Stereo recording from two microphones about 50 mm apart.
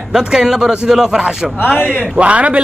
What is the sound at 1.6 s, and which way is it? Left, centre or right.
Speech, left.